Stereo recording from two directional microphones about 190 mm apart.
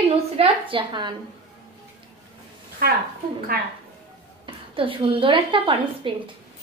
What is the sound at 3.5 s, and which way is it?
Speech, 50° right (ahead or behind).